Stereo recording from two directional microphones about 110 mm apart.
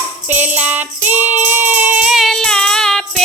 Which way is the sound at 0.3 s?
15° right (ahead or behind).